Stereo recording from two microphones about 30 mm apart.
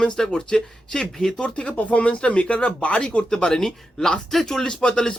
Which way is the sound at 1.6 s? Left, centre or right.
Left.